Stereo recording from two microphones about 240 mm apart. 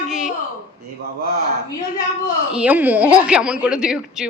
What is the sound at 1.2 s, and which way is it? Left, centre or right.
Speech, right.